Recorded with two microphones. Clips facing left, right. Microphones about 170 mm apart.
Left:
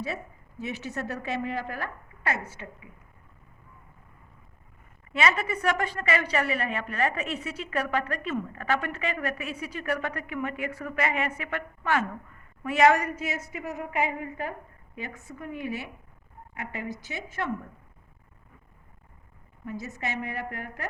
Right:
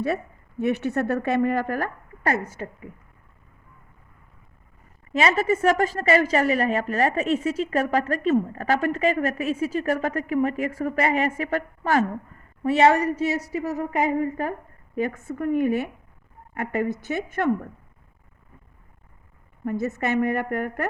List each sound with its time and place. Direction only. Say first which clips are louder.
0.6 s a woman's voice: right 10 dB; 60° right (ahead or behind); by 2.9 s 40° right (ahead or behind)
5.1 s a woman's voice: right 6 dB; 35° right (ahead or behind); by 17.5 s 55° right (ahead or behind)
19.6 s a woman's voice: right 9 dB; 55° right (ahead or behind)